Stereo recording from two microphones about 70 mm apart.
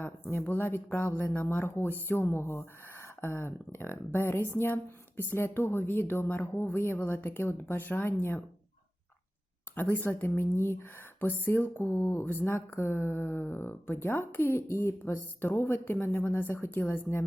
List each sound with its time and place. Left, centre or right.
0.0 s speech: left
9.7 s speech: left